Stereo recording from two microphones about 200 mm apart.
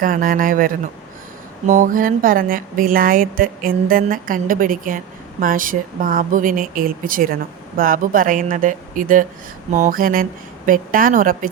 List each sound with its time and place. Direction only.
0.0 s speech: 45° right (ahead or behind)